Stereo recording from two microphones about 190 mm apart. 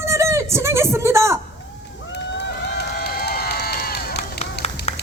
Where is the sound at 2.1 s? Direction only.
65° left (ahead or behind).